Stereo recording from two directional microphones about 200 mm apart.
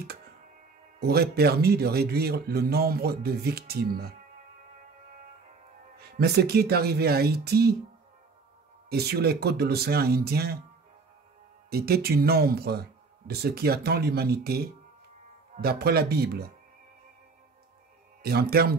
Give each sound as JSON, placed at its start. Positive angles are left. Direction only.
{"t": 0.9, "sound": "speech", "side_deg": -50}
{"t": 5.9, "sound": "speech", "side_deg": -50}
{"t": 8.8, "sound": "speech", "side_deg": -55}
{"t": 11.7, "sound": "speech", "side_deg": -50}
{"t": 18.2, "sound": "speech", "side_deg": -50}